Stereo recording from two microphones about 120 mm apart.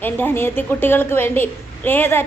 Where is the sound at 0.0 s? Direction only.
15° left (ahead or behind).